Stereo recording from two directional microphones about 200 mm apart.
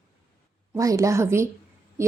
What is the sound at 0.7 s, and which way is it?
Speech, 15° right (ahead or behind).